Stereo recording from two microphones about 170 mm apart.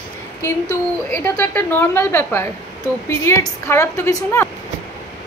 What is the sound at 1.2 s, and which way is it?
A woman's voice, 10° left (ahead or behind).